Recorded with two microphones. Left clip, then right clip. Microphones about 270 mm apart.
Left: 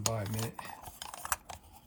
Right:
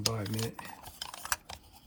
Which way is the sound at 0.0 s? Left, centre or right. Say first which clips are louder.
Right 1 dB; centre.